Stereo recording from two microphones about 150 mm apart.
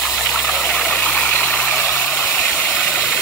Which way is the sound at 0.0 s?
5° left (ahead or behind).